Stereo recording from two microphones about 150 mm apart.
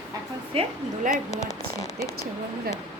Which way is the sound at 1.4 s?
20° left (ahead or behind).